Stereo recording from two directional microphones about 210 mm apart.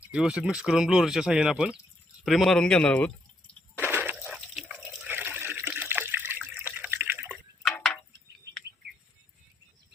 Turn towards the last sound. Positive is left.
turn(degrees=5)  # may be behind; listen again after turning